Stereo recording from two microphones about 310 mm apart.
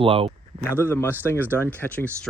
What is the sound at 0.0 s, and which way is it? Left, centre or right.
Speech, centre.